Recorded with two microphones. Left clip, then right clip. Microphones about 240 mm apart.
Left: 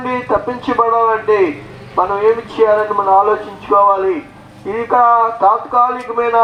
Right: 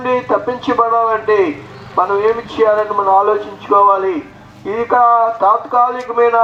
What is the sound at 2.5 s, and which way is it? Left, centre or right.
A man's voice, right.